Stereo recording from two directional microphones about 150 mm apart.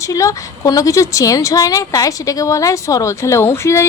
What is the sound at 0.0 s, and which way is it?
A woman's voice, 20° left (ahead or behind).